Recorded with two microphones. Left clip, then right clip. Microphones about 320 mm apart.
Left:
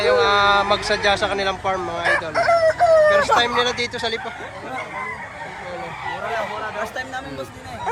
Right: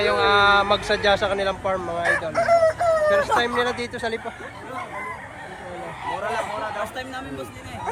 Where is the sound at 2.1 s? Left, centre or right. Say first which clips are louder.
Left 1 dB; left.